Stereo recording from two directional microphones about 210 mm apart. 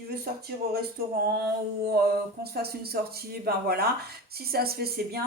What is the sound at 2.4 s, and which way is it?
A woman's voice, 50° right (ahead or behind).